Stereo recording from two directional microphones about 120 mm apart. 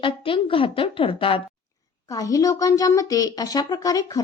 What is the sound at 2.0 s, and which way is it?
A woman's voice, 30° left (ahead or behind).